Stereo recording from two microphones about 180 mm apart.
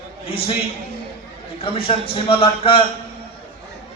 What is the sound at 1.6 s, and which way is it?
A man's voice, 30° left (ahead or behind).